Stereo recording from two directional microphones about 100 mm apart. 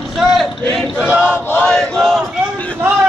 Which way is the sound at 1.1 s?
10° right (ahead or behind).